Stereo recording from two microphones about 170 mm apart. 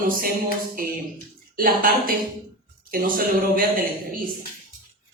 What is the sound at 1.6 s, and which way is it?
Speech, 55° right (ahead or behind).